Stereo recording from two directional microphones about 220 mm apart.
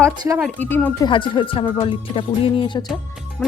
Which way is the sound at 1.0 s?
20° left (ahead or behind).